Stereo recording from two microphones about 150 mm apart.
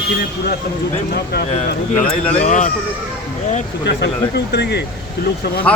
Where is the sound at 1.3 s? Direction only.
90° left.